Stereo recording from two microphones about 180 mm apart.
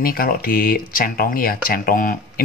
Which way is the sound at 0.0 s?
55° left (ahead or behind).